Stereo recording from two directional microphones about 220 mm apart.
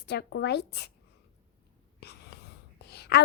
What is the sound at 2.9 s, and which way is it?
Whispering, 50° left (ahead or behind).